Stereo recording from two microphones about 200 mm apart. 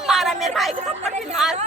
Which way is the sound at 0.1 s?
Centre (ahead or behind).